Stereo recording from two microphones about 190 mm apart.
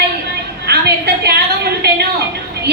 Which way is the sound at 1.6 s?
60° right (ahead or behind).